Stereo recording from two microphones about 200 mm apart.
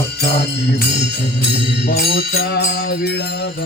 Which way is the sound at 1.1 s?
55° left (ahead or behind).